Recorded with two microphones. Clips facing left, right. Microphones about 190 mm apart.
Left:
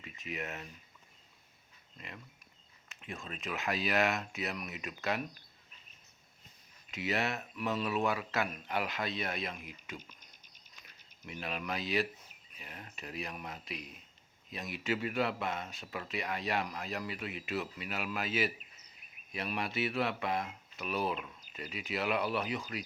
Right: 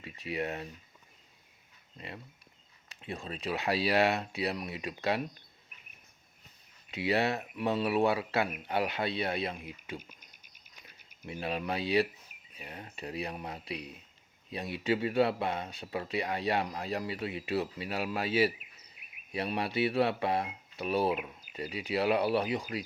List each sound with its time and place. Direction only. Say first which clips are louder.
0.0 s speech: right 6 dB; 35° right (ahead or behind)
2.0 s speech: right 5 dB; 30° right (ahead or behind)
6.9 s speech: right 5 dB; 30° right (ahead or behind)
10.0 s cricket: right 2 dB; 10° right (ahead or behind)
11.3 s speech: right 5 dB; 30° right (ahead or behind)